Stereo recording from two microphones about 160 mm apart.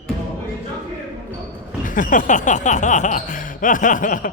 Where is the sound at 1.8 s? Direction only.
55° left (ahead or behind).